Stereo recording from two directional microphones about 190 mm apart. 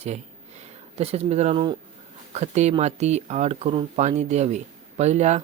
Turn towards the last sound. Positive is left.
turn(degrees=-35)  # may be behind; listen again after turning